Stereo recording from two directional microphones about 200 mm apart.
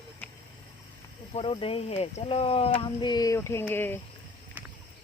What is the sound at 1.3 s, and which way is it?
Speech, 30° left (ahead or behind).